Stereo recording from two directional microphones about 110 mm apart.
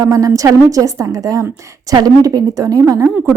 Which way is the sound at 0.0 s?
30° right (ahead or behind).